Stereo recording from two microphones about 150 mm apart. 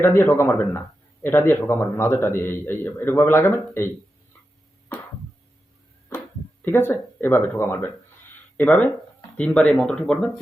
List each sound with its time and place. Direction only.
0.0 s a man's voice: 15° left (ahead or behind)
6.6 s a man's voice: 15° left (ahead or behind)